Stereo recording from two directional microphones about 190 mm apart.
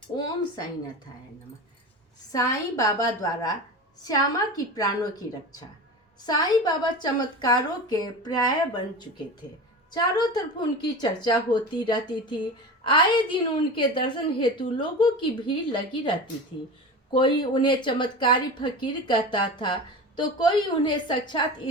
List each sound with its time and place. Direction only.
2.3 s a woman's voice: 15° left (ahead or behind)
6.2 s speech: 20° left (ahead or behind)
9.9 s speech: 20° left (ahead or behind)